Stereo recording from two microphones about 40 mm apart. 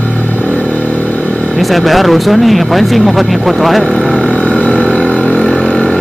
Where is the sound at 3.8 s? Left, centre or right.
Left.